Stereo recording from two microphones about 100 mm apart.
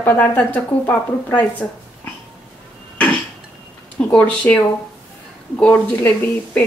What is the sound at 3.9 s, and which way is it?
A woman's voice, 15° left (ahead or behind).